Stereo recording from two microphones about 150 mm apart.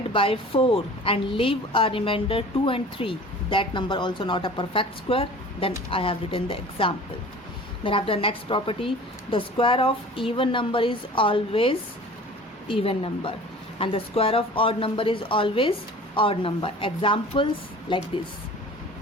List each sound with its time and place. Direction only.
0.1 s a woman's voice: 35° left (ahead or behind)